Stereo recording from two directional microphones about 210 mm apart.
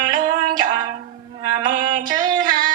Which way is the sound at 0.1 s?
20° right (ahead or behind).